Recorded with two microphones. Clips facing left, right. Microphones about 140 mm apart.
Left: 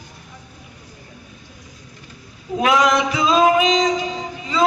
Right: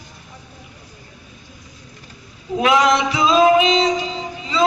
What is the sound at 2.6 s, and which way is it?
Music, 45° left (ahead or behind).